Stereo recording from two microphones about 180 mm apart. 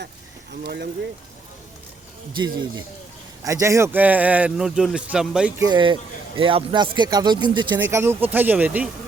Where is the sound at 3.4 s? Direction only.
15° right (ahead or behind).